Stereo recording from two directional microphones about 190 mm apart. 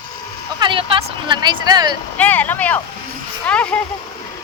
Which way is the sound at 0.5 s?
25° right (ahead or behind).